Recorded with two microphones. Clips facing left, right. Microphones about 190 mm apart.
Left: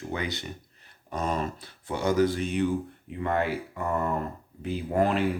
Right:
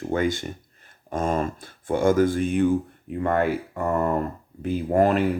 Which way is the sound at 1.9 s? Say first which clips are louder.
Right 5 dB; 50° right (ahead or behind).